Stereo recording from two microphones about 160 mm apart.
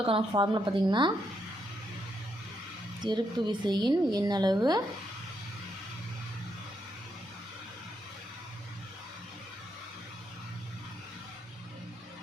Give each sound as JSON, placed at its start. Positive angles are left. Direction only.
{"t": 0.0, "sound": "speech", "side_deg": -35}
{"t": 3.0, "sound": "speech", "side_deg": -30}